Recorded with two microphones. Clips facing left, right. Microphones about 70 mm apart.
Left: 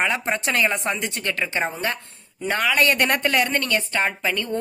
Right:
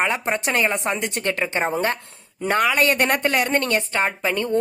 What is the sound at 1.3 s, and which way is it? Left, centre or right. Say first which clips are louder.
Speech: right 2 dB; right.